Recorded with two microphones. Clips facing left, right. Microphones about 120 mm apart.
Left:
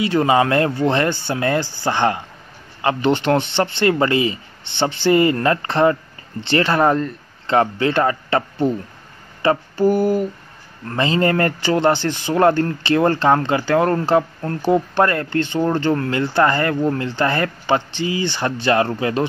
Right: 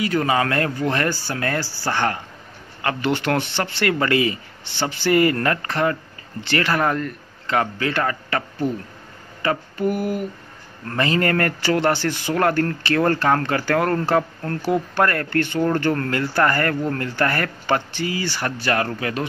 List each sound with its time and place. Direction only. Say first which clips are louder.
0.0 s speech: left 4 dB; 25° left (ahead or behind)
9.4 s mantra: left 5 dB; 30° left (ahead or behind)
10.9 s speech: left 2 dB; 25° left (ahead or behind)